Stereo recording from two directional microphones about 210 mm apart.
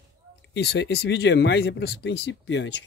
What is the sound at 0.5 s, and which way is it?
Speech, 55° left (ahead or behind).